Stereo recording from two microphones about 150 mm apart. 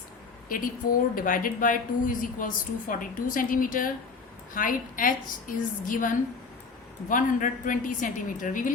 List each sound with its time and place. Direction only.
0.4 s a woman's voice: 65° left (ahead or behind)